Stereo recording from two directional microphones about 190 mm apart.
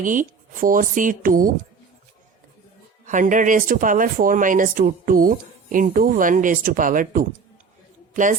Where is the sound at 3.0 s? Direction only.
40° right (ahead or behind).